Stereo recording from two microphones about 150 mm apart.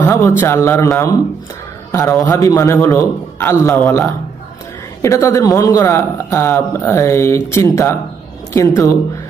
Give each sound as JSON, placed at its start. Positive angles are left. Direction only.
{"t": 0.0, "sound": "a man's voice", "side_deg": 20}
{"t": 5.0, "sound": "a man's voice", "side_deg": 20}